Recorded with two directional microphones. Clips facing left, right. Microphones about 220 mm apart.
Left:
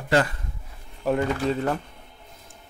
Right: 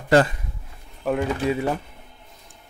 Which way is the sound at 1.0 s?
5° right (ahead or behind).